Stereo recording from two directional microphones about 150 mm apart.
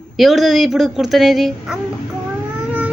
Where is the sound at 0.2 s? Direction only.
Centre (ahead or behind).